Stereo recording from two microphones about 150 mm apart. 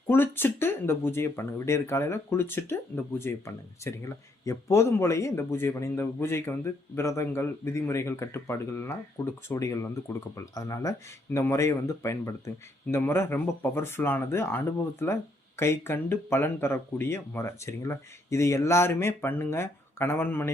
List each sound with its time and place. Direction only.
0.1 s speech: 15° left (ahead or behind)